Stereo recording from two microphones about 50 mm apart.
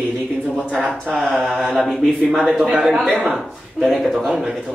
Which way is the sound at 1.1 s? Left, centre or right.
Centre.